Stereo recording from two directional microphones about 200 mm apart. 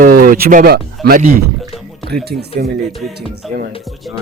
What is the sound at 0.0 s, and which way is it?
Speech, 45° right (ahead or behind).